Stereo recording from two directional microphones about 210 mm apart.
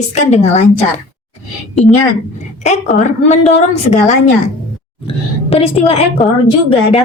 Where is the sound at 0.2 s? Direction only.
30° left (ahead or behind).